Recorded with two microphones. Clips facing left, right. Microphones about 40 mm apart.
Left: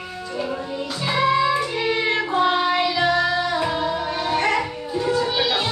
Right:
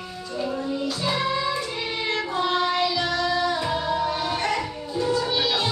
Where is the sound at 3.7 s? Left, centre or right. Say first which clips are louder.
Left 1 dB; centre.